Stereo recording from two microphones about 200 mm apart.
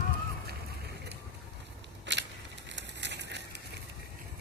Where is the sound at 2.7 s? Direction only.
60° right (ahead or behind).